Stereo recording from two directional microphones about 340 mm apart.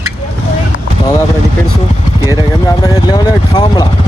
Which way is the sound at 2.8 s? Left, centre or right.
Centre.